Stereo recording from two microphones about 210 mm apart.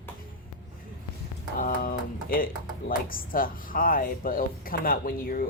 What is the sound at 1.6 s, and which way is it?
Speech, 40° left (ahead or behind).